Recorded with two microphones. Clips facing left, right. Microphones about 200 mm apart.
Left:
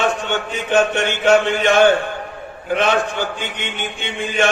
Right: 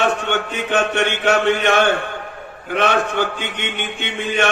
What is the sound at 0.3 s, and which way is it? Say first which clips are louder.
A man's voice: even; 65° right (ahead or behind).